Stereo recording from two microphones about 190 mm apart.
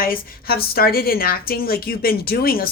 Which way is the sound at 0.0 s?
50° left (ahead or behind).